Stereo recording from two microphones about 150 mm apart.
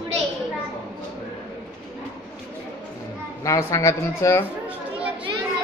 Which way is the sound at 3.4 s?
20° left (ahead or behind).